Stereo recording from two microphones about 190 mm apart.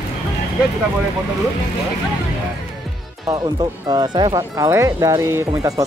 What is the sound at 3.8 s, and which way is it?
Speech, 25° right (ahead or behind).